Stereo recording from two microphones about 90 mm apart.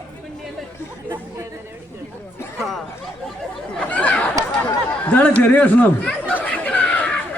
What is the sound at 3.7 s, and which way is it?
Chatter, 15° left (ahead or behind).